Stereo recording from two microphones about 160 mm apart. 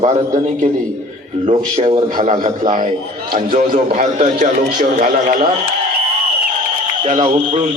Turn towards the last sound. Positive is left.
turn(degrees=-40)  # may be behind; listen again after turning